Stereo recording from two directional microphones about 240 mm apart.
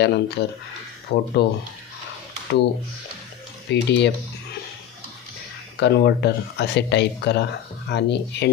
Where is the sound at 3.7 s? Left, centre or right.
Left.